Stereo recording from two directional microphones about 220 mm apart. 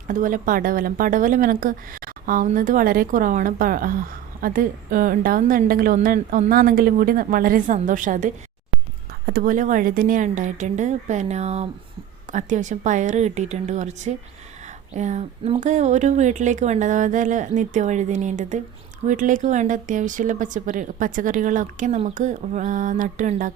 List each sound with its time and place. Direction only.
0.1 s speech: 35° right (ahead or behind)